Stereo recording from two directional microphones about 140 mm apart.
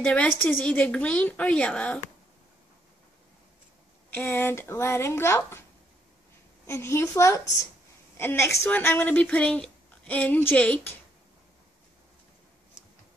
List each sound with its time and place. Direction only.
0.0 s speech: 10° left (ahead or behind)
4.1 s speech: 15° left (ahead or behind)
6.6 s a woman's voice: 20° left (ahead or behind)